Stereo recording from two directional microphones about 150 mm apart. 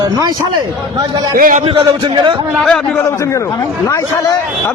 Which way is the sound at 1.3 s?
65° right (ahead or behind).